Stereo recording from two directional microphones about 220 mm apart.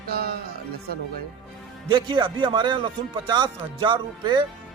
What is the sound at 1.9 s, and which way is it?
Speech, 20° right (ahead or behind).